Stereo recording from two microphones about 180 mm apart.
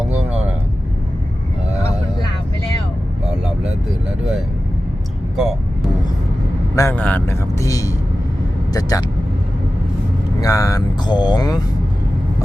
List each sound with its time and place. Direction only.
3.2 s vehicle: 5° right (ahead or behind)
6.7 s speech: 10° left (ahead or behind)
8.7 s vehicle: 20° left (ahead or behind)
10.4 s vehicle: 20° left (ahead or behind)